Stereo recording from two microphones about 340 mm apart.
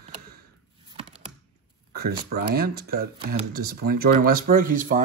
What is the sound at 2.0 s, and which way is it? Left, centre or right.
Speech, right.